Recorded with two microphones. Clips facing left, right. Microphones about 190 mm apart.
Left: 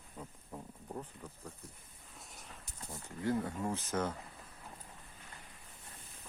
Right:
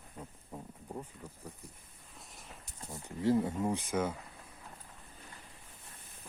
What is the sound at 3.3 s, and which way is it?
Speech, 15° right (ahead or behind).